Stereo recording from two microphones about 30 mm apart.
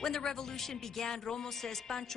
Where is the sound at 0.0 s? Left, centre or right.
Centre.